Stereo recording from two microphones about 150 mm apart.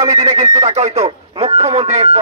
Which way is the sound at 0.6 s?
45° right (ahead or behind).